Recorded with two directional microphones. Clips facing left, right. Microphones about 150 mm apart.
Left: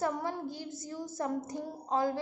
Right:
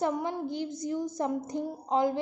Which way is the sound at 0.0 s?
20° right (ahead or behind).